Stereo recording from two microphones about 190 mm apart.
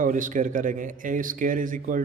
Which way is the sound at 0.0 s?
45° right (ahead or behind).